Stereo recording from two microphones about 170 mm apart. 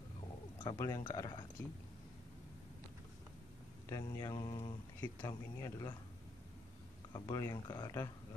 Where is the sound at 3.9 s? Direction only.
20° left (ahead or behind).